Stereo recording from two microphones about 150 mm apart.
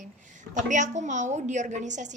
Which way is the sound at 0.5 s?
55° right (ahead or behind).